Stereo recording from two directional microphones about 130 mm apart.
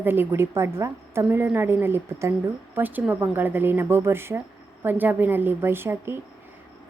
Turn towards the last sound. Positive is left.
turn(degrees=-15)  # may be behind; listen again after turning